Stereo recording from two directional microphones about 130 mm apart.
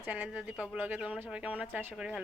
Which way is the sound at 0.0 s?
10° right (ahead or behind).